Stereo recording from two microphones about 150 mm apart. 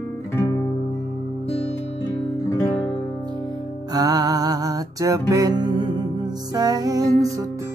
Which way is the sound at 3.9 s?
25° right (ahead or behind).